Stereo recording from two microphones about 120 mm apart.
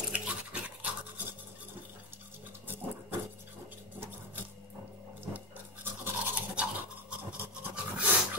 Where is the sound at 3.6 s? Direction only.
15° right (ahead or behind).